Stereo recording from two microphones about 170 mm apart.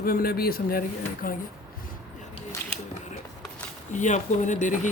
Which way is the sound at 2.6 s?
15° left (ahead or behind).